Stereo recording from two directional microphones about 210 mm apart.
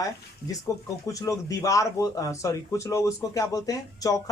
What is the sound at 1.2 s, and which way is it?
Speech, 15° left (ahead or behind).